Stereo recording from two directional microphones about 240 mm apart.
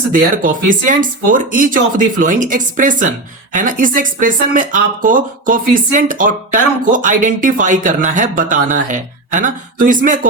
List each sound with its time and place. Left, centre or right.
0.1 s speech: right